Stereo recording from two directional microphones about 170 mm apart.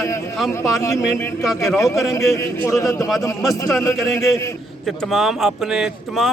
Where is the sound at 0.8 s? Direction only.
20° left (ahead or behind).